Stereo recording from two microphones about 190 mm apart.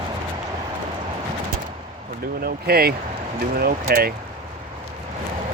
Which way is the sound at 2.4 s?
55° right (ahead or behind).